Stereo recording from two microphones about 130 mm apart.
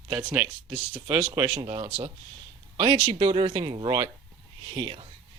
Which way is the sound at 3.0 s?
40° right (ahead or behind).